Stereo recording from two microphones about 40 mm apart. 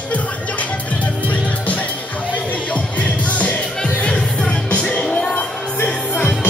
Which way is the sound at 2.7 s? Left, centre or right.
Left.